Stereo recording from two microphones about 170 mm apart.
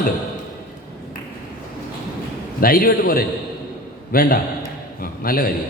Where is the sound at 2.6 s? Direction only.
60° left (ahead or behind).